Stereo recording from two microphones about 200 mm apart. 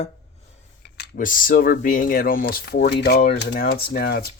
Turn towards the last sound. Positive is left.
turn(degrees=50)  # may be behind; listen again after turning